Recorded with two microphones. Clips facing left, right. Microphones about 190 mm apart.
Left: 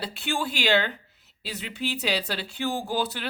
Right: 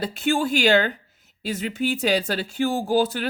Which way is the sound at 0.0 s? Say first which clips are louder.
Right 7 dB; 45° right (ahead or behind).